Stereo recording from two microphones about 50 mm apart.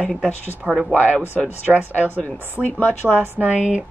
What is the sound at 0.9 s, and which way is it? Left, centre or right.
Speech, left.